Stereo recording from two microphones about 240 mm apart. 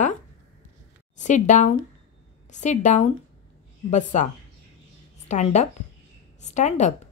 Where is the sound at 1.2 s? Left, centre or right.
Left.